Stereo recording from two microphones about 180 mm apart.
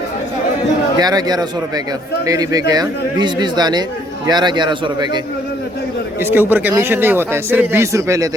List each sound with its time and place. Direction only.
0.9 s a man's voice: 20° right (ahead or behind)
6.1 s speech: 10° right (ahead or behind)